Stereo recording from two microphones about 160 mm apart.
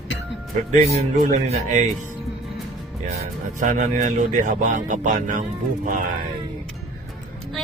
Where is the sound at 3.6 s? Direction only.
55° right (ahead or behind).